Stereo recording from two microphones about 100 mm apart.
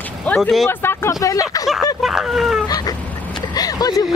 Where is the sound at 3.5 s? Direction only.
40° left (ahead or behind).